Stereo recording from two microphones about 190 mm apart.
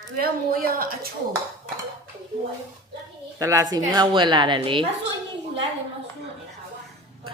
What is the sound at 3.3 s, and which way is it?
A woman's voice, 20° right (ahead or behind).